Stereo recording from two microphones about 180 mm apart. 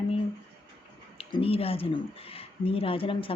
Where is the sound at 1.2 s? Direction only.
30° left (ahead or behind).